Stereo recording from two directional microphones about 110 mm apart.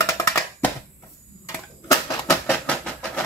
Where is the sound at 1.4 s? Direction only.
25° left (ahead or behind).